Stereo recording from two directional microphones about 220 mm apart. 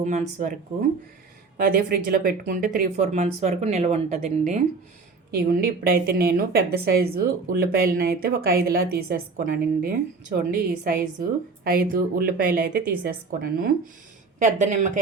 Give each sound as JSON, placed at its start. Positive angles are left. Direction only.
{"t": 0.0, "sound": "a woman's voice", "side_deg": -35}